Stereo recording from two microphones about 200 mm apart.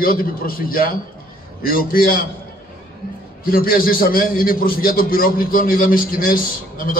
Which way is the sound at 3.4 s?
45° left (ahead or behind).